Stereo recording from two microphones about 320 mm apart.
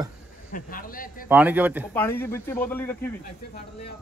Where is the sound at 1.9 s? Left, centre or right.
Centre.